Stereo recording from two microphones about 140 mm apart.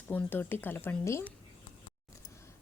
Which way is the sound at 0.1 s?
10° left (ahead or behind).